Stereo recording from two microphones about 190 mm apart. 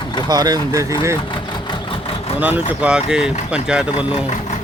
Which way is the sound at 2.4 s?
10° right (ahead or behind).